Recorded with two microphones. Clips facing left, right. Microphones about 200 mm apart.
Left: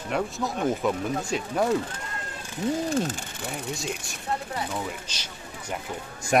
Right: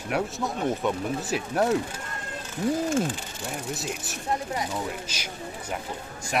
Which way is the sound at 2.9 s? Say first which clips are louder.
Right 1 dB; 40° left (ahead or behind).